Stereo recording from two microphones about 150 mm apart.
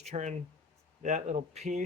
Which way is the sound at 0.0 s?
50° right (ahead or behind).